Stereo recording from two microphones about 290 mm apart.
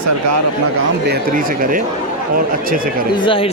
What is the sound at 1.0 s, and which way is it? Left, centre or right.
Speech, right.